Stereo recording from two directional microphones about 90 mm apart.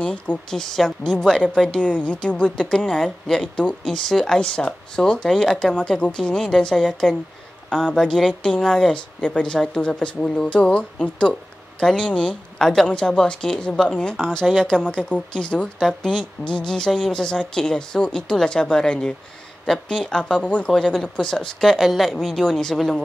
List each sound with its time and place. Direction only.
0.0 s a woman's voice: 10° left (ahead or behind)